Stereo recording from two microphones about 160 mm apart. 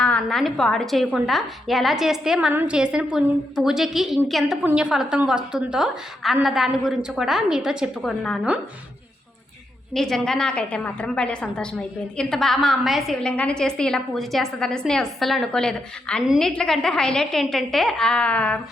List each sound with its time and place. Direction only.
0.0 s a woman's voice: 5° left (ahead or behind)
9.9 s a woman's voice: 5° left (ahead or behind)